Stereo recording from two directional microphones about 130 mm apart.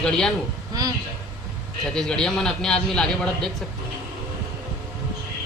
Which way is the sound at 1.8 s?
5° left (ahead or behind).